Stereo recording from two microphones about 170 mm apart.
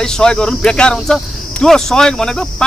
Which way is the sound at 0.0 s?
5° left (ahead or behind).